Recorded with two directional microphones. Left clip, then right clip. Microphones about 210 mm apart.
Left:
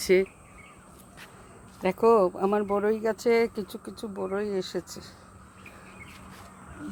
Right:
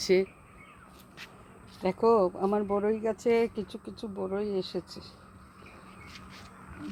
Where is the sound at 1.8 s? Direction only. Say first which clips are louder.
Left 3 dB; centre (ahead or behind).